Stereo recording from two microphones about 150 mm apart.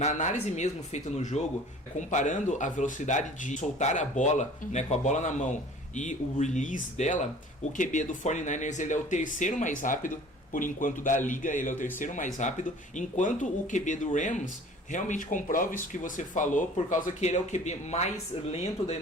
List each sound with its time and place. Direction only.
0.0 s speech: 55° left (ahead or behind)